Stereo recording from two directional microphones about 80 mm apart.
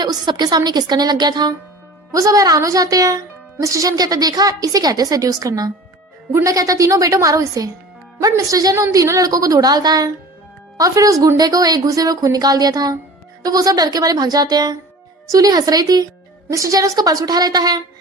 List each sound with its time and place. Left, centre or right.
0.0 s a woman's voice: right
2.1 s a woman's voice: right